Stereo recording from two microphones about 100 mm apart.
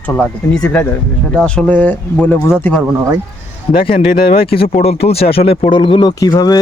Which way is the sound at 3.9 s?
65° left (ahead or behind).